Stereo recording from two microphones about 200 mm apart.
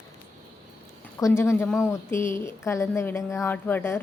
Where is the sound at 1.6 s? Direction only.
Centre (ahead or behind).